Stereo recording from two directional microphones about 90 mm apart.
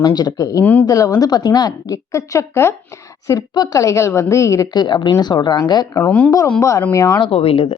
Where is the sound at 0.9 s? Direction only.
40° left (ahead or behind).